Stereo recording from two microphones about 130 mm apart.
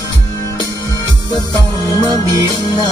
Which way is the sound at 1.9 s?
25° left (ahead or behind).